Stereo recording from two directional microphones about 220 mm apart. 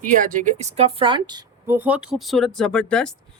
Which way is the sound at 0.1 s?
35° right (ahead or behind).